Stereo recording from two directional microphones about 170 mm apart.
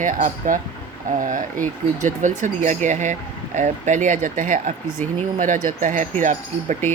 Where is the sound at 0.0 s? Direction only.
50° right (ahead or behind).